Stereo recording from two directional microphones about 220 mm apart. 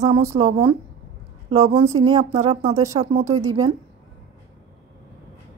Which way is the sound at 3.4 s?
15° right (ahead or behind).